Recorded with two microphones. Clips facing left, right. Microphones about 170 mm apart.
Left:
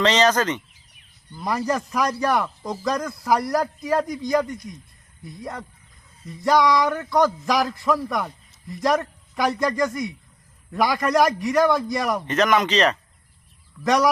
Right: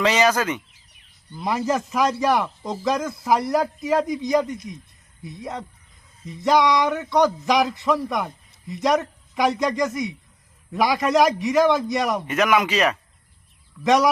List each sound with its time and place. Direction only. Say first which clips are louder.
0.0 s speech: left 1 dB; 10° right (ahead or behind)
1.6 s a man's voice: right 2 dB; centre (ahead or behind)
6.5 s speech: even; 20° right (ahead or behind)
6.8 s a man's voice: right 1 dB; centre (ahead or behind)